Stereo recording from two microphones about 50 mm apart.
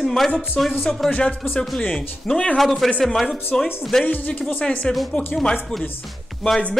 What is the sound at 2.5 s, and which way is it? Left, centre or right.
Speech, centre.